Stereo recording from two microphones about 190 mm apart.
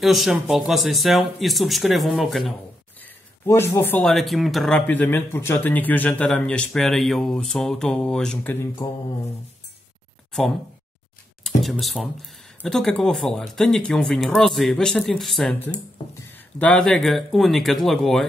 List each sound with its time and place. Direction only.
0.0 s speech: centre (ahead or behind)
3.0 s speech: 15° left (ahead or behind)
8.8 s mantra: 20° left (ahead or behind)
11.4 s speech: centre (ahead or behind)